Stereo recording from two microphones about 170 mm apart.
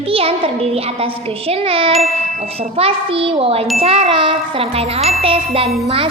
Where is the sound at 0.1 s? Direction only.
35° right (ahead or behind).